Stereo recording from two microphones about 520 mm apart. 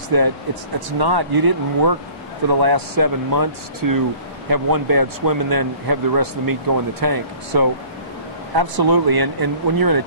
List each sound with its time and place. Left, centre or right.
0.1 s speech: right